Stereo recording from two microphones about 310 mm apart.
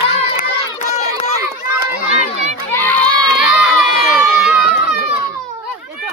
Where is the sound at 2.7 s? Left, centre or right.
Centre.